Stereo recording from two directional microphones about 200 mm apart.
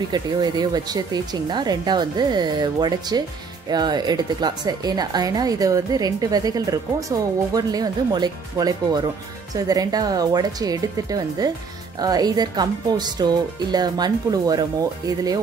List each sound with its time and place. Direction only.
0.1 s speech: 20° right (ahead or behind)